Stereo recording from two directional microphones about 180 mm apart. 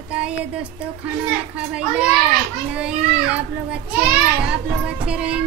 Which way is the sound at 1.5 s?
5° right (ahead or behind).